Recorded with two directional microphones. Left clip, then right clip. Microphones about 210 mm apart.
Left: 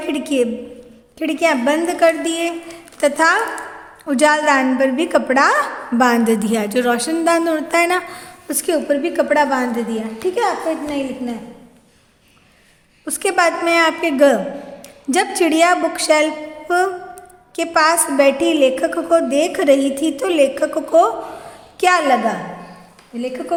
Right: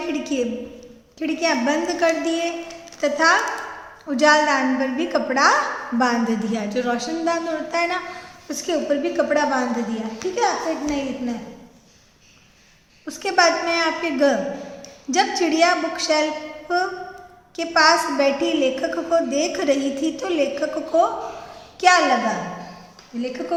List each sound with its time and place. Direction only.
0.1 s a woman's voice: 45° left (ahead or behind)
13.1 s speech: 45° left (ahead or behind)
15.4 s a woman's voice: 45° left (ahead or behind)
23.5 s a woman's voice: 35° left (ahead or behind)